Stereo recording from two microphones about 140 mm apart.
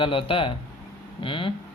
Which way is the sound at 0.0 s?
40° left (ahead or behind).